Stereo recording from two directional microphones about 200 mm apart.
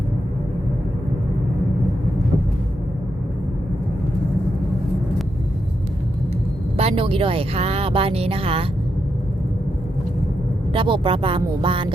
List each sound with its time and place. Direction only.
6.7 s speech: 30° right (ahead or behind)
10.7 s speech: 25° right (ahead or behind)